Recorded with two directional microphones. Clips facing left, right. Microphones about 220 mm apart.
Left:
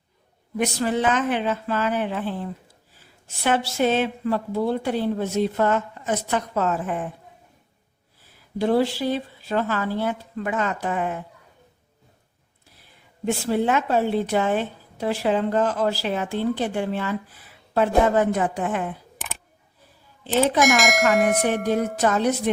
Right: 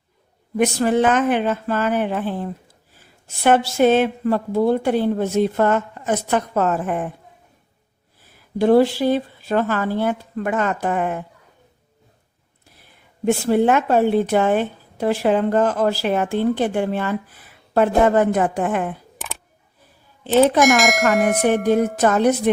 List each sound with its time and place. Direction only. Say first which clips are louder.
0.6 s a woman's voice: right 5 dB; 50° right (ahead or behind)
8.5 s a woman's voice: right 6 dB; 50° right (ahead or behind)
13.2 s a woman's voice: right 6 dB; 55° right (ahead or behind)
20.6 s speech: right 3 dB; centre (ahead or behind)
21.4 s a woman's voice: right 5 dB; 55° right (ahead or behind)